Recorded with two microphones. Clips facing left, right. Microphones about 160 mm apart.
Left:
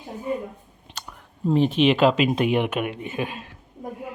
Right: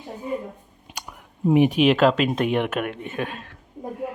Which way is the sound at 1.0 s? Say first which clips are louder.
Right 1 dB; 15° right (ahead or behind).